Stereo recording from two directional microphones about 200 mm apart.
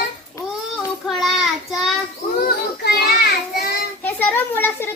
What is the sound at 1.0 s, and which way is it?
Child singing, centre (ahead or behind).